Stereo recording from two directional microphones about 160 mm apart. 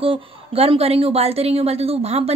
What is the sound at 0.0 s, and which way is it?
A woman's voice, 35° right (ahead or behind).